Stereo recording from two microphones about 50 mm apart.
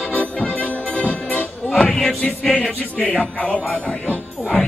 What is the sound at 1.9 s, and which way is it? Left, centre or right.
Speech, centre.